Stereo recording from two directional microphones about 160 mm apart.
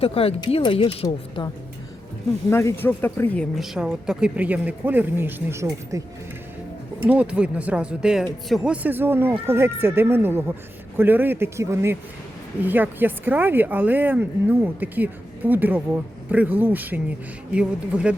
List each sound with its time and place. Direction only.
0.0 s a woman's voice: 35° left (ahead or behind)
2.5 s speech: 15° left (ahead or behind)
3.6 s speech: 5° right (ahead or behind)
7.0 s speech: 10° right (ahead or behind)